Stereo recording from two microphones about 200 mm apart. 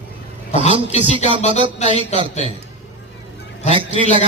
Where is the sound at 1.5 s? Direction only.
25° right (ahead or behind).